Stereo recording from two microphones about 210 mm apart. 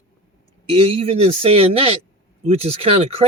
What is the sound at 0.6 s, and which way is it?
Speech, 25° right (ahead or behind).